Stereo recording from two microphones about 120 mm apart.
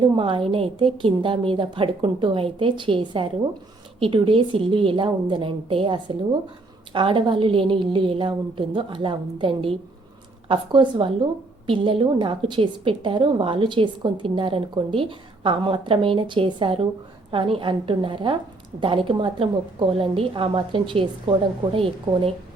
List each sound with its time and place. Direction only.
0.0 s a woman's voice: 45° right (ahead or behind)